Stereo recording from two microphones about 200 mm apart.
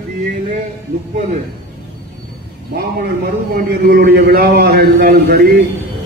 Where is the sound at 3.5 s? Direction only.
45° right (ahead or behind).